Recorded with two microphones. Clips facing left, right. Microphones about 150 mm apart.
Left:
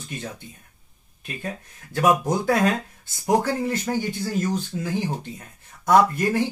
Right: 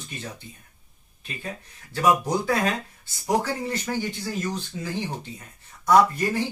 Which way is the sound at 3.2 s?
50° left (ahead or behind).